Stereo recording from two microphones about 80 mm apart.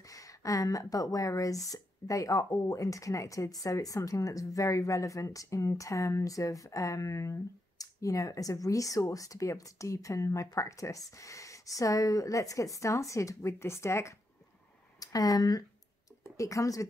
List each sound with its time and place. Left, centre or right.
0.1 s speech: left
15.0 s speech: left
16.3 s speech: left